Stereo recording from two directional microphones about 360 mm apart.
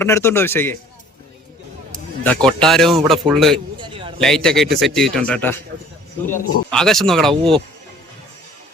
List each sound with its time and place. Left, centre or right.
0.0 s a man's voice: centre
2.2 s a man's voice: centre
3.8 s a sound: centre
4.2 s a man's voice: centre